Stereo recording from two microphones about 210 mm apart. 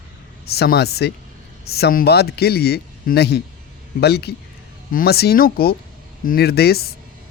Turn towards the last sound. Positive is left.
turn(degrees=50)  # may be behind; listen again after turning